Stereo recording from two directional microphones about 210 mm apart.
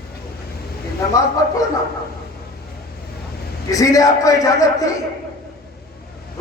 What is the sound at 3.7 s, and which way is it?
Speech, 15° left (ahead or behind).